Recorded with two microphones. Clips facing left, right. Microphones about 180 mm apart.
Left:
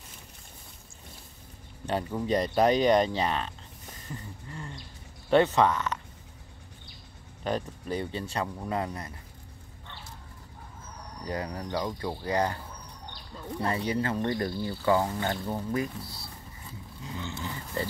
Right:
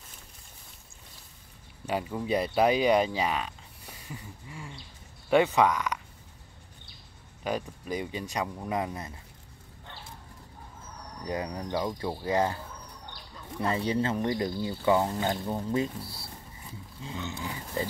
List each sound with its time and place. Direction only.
1.9 s speech: 5° right (ahead or behind)
7.4 s speech: 10° right (ahead or behind)
11.2 s speech: 15° right (ahead or behind)
13.6 s speech: 20° right (ahead or behind)
17.0 s speech: 20° right (ahead or behind)